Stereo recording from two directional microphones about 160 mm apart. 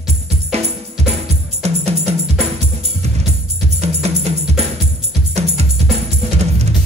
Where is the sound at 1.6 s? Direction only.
40° right (ahead or behind).